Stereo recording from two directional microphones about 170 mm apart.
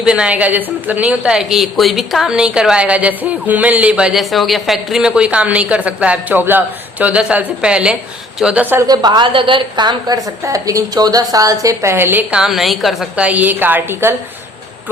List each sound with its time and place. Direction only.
0.0 s a woman's voice: 5° right (ahead or behind)
8.8 s a woman's voice: 25° right (ahead or behind)